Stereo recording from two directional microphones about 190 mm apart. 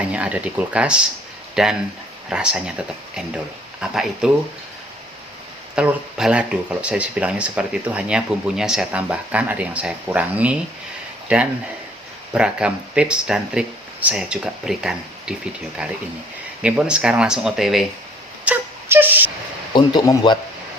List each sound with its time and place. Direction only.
0.1 s speech: 5° right (ahead or behind)
5.7 s speech: 5° right (ahead or behind)
18.4 s a sound: 10° right (ahead or behind)
19.7 s speech: 20° left (ahead or behind)